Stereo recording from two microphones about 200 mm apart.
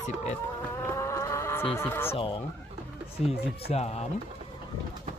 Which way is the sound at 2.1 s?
25° left (ahead or behind).